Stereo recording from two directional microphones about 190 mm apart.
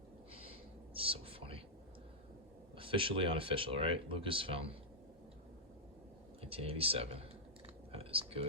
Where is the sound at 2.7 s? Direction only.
30° right (ahead or behind).